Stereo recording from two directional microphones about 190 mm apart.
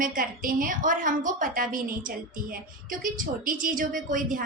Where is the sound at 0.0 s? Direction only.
45° right (ahead or behind).